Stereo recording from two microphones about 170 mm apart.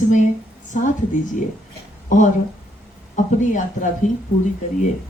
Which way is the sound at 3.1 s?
50° left (ahead or behind).